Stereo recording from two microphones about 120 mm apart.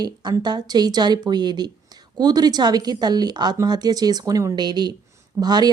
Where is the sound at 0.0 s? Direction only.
35° right (ahead or behind).